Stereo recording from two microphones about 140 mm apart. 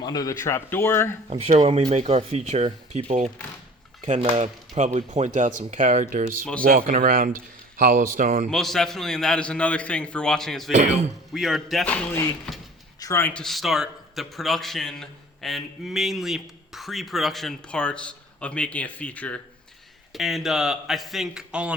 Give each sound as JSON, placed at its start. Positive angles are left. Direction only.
{"t": 0.0, "sound": "speech", "side_deg": 25}
{"t": 1.3, "sound": "speech", "side_deg": -45}
{"t": 6.6, "sound": "speech", "side_deg": -90}
{"t": 8.4, "sound": "a man's voice", "side_deg": 5}
{"t": 13.4, "sound": "a man's voice", "side_deg": 0}
{"t": 20.1, "sound": "a man's voice", "side_deg": 0}